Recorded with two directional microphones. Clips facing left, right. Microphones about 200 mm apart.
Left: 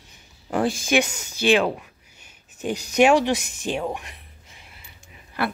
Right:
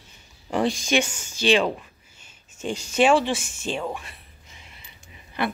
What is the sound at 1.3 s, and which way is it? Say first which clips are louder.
A woman's voice: left 1 dB; 10° left (ahead or behind).